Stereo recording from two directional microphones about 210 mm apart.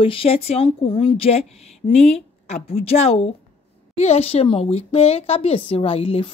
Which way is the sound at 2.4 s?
30° left (ahead or behind).